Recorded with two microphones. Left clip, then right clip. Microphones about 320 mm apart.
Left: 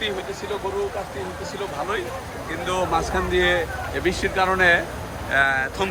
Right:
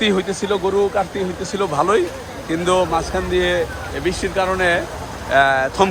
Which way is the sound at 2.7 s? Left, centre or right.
Centre.